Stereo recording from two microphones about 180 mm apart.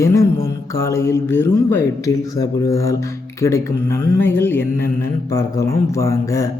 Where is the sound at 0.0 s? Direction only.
15° left (ahead or behind).